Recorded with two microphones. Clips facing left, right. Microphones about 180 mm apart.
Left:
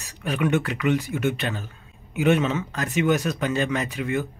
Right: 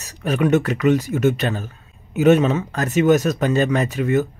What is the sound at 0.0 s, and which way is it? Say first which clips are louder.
Speech: right 5 dB; 45° right (ahead or behind).